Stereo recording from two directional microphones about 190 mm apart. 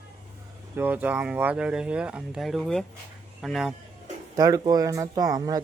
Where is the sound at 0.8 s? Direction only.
10° right (ahead or behind).